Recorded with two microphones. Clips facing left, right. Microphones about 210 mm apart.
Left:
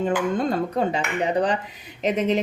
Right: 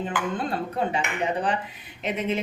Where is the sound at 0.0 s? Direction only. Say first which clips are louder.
Left 6 dB; 45° left (ahead or behind).